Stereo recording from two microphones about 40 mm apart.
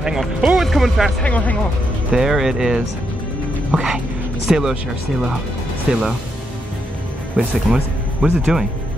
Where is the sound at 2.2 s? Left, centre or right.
Centre.